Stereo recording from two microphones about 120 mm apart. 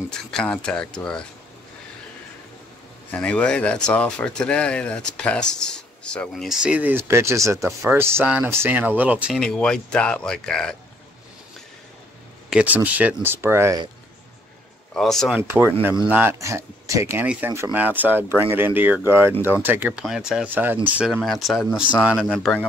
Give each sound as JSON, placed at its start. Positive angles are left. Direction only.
{"t": 0.3, "sound": "speech", "side_deg": 5}
{"t": 3.1, "sound": "speech", "side_deg": 10}
{"t": 9.3, "sound": "speech", "side_deg": 5}
{"t": 12.4, "sound": "speech", "side_deg": -10}
{"t": 15.0, "sound": "speech", "side_deg": 5}
{"t": 15.4, "sound": "speech", "side_deg": -20}
{"t": 16.3, "sound": "speech", "side_deg": -25}
{"t": 17.7, "sound": "speech", "side_deg": -15}
{"t": 20.1, "sound": "speech", "side_deg": -5}
{"t": 21.1, "sound": "speech", "side_deg": 0}